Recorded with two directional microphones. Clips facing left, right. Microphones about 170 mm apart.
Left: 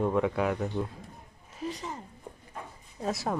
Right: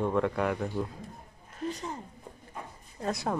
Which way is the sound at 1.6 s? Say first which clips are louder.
Right 1 dB; centre (ahead or behind).